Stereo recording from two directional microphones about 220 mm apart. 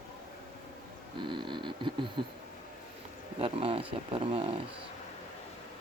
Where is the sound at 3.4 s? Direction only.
25° right (ahead or behind).